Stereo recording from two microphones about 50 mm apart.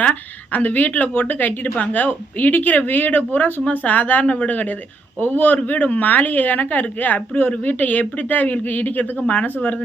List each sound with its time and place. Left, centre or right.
0.0 s a woman's voice: left